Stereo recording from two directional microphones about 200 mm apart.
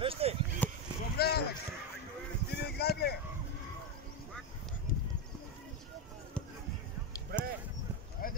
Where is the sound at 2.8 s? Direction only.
55° left (ahead or behind).